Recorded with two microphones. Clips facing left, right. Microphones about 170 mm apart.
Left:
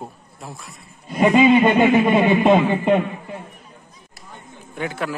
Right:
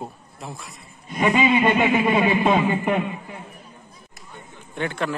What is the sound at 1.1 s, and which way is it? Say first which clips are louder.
Speech: left 6 dB; 35° left (ahead or behind).